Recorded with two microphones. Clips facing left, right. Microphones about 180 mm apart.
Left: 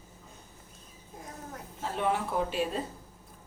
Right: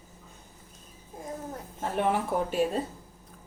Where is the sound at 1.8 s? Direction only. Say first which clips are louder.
Right 3 dB; 50° right (ahead or behind).